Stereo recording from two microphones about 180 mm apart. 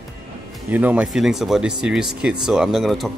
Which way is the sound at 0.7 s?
10° right (ahead or behind).